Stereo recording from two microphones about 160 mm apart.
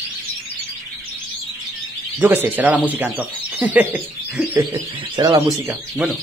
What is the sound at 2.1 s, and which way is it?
Speech, 10° right (ahead or behind).